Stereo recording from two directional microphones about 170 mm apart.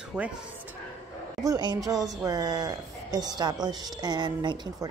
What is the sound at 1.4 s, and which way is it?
A man's voice, 20° right (ahead or behind).